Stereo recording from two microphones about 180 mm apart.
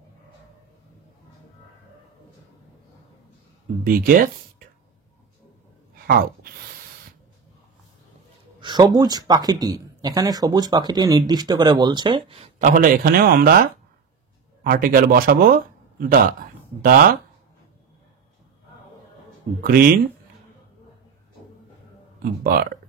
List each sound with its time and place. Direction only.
3.8 s speech: 50° right (ahead or behind)
5.9 s sigh: 55° right (ahead or behind)
8.5 s speech: 25° right (ahead or behind)
12.6 s a man's voice: 50° right (ahead or behind)
19.6 s speech: 55° right (ahead or behind)
22.2 s speech: 55° right (ahead or behind)